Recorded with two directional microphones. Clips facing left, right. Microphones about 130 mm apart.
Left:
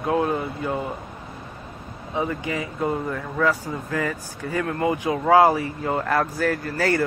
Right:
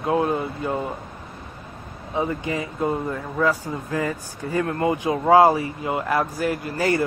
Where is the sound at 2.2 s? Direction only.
25° right (ahead or behind).